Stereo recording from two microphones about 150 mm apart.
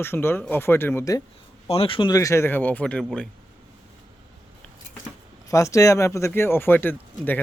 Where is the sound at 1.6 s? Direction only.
40° left (ahead or behind).